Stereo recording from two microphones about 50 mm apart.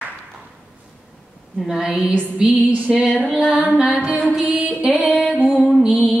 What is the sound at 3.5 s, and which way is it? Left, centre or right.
Music, right.